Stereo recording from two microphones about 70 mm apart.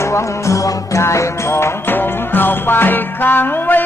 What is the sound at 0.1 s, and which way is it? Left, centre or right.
Music, left.